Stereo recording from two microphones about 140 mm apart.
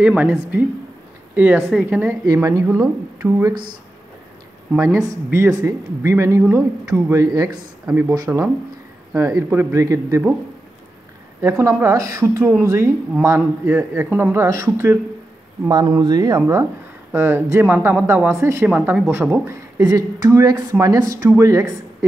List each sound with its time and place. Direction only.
0.0 s a woman's voice: 5° right (ahead or behind)
2.2 s a woman's voice: 25° right (ahead or behind)
5.3 s a woman's voice: 20° right (ahead or behind)
8.3 s a woman's voice: 15° right (ahead or behind)
11.4 s a woman's voice: 20° right (ahead or behind)
15.7 s a woman's voice: 30° right (ahead or behind)